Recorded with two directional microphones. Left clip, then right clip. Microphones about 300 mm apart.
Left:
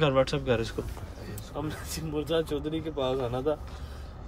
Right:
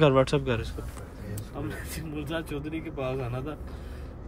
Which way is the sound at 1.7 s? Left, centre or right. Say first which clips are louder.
Left 1 dB; centre.